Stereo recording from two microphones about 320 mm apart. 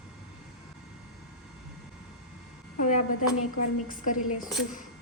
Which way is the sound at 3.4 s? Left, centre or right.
Left.